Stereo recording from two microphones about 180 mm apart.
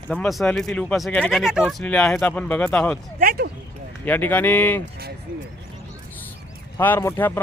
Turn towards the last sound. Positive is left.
turn(degrees=15)  # may be behind; listen again after turning